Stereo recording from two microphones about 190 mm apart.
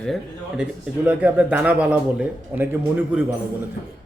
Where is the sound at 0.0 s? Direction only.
Centre (ahead or behind).